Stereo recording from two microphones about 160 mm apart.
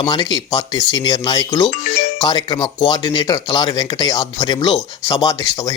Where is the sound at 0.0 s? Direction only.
25° left (ahead or behind).